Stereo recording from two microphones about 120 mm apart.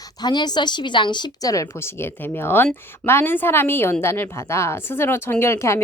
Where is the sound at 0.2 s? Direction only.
35° left (ahead or behind).